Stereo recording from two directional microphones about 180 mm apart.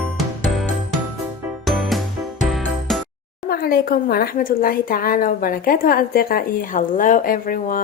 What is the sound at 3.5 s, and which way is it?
Speech, 55° left (ahead or behind).